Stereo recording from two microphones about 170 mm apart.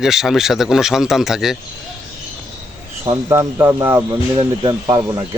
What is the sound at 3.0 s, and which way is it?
Speech, 20° right (ahead or behind).